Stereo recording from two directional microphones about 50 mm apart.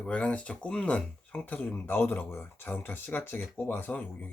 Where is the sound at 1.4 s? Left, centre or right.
Left.